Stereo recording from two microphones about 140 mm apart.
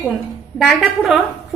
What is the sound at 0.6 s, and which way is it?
Speech, centre (ahead or behind).